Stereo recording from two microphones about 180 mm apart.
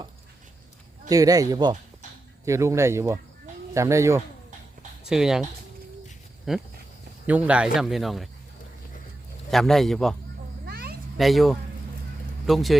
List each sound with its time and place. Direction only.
1.1 s speech: 20° right (ahead or behind)
5.0 s speech: 5° right (ahead or behind)
6.5 s speech: centre (ahead or behind)
9.5 s speech: centre (ahead or behind)
10.7 s cat: 60° right (ahead or behind)
11.2 s speech: centre (ahead or behind)